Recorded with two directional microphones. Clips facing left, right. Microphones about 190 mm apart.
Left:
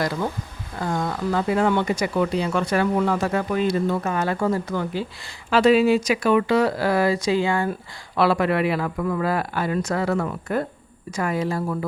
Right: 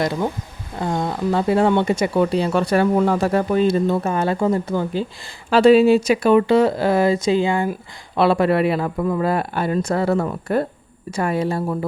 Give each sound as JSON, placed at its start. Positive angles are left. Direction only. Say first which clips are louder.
{"t": 0.0, "sound": "speech", "louder": "right 3 dB", "side_deg": -20}